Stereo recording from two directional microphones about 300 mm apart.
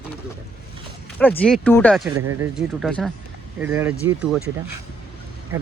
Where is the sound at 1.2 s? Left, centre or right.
Centre.